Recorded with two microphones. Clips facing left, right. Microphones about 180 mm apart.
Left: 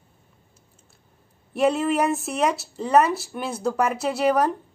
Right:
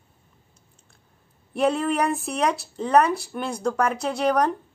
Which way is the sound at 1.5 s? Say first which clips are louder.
Left 1 dB; centre (ahead or behind).